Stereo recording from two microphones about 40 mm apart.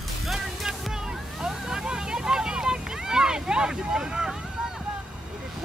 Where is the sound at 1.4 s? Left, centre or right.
Centre.